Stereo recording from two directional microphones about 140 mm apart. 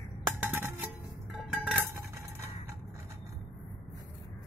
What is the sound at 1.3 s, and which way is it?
Music, centre (ahead or behind).